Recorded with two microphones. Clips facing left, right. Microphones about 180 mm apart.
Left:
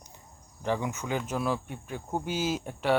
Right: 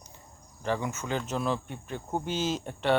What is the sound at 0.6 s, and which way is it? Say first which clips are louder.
Speech: left 1 dB; 15° left (ahead or behind).